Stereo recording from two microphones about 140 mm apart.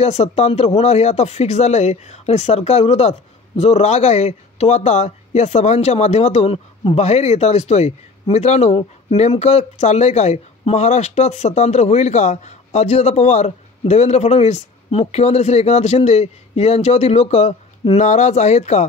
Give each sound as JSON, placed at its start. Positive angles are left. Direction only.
{"t": 0.0, "sound": "speech", "side_deg": 50}
{"t": 7.0, "sound": "speech", "side_deg": 50}